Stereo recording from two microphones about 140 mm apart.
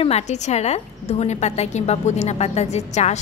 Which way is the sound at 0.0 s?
50° left (ahead or behind).